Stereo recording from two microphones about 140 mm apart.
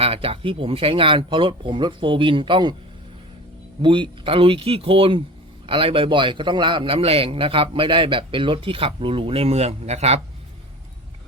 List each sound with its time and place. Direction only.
0.0 s a man's voice: 45° right (ahead or behind)
3.8 s a man's voice: 35° right (ahead or behind)